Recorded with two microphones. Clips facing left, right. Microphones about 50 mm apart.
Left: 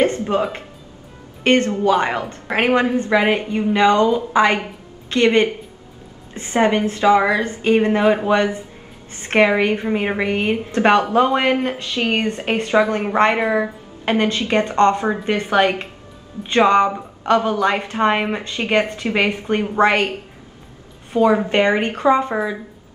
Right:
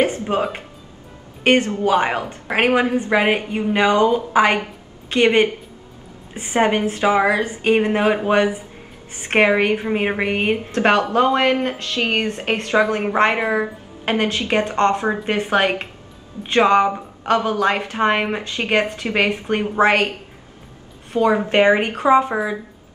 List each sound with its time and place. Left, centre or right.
0.0 s a woman's voice: centre
10.7 s a woman's voice: centre
21.1 s a woman's voice: centre